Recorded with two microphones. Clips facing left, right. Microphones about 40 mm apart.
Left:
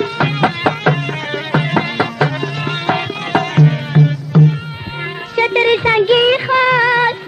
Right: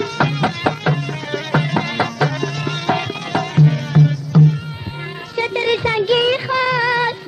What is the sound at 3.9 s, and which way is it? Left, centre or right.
Music, left.